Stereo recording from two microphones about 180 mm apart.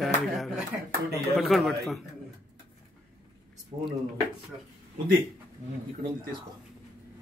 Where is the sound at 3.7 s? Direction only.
25° right (ahead or behind).